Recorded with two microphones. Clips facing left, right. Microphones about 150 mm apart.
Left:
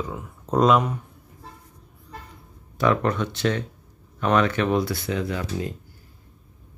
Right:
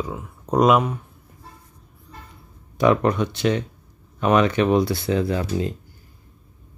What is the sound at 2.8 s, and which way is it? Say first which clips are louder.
Speech: right 4 dB; 15° right (ahead or behind).